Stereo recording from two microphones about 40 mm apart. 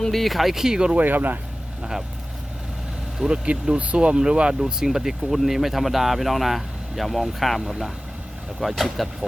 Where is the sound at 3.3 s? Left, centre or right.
Right.